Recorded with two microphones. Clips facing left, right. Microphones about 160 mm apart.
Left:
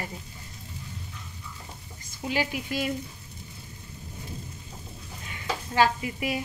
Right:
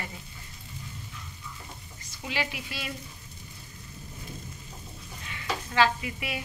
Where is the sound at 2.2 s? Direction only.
40° left (ahead or behind).